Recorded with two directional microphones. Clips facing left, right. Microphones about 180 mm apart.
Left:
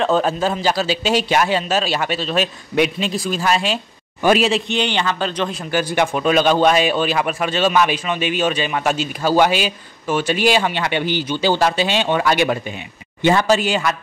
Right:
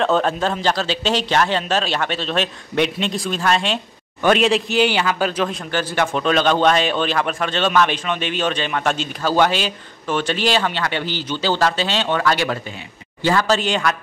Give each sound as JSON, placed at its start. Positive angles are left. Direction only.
{"t": 0.0, "sound": "a man's voice", "side_deg": 5}
{"t": 5.7, "sound": "speech", "side_deg": 10}
{"t": 13.6, "sound": "a man's voice", "side_deg": 5}